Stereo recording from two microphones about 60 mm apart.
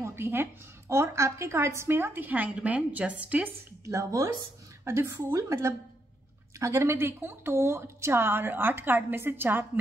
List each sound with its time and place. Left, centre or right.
0.0 s a woman's voice: right
3.8 s speech: right
4.8 s a woman's voice: right